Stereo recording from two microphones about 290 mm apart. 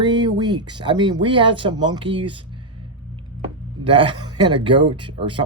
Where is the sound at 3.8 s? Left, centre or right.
Centre.